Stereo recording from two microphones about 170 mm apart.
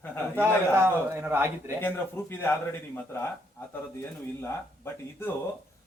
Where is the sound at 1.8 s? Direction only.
10° left (ahead or behind).